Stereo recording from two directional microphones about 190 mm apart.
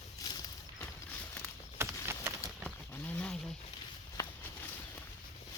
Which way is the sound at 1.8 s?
10° right (ahead or behind).